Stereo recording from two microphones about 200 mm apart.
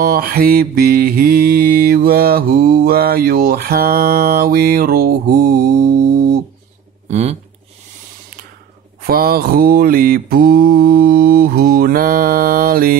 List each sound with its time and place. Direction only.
0.0 s mantra: 50° right (ahead or behind)
7.1 s speech: 35° right (ahead or behind)
9.0 s mantra: 50° right (ahead or behind)